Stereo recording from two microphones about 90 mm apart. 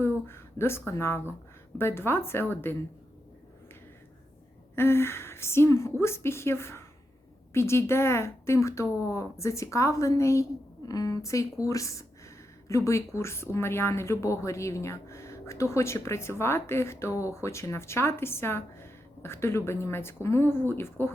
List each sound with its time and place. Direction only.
0.0 s a woman's voice: 25° left (ahead or behind)
4.7 s a woman's voice: 25° left (ahead or behind)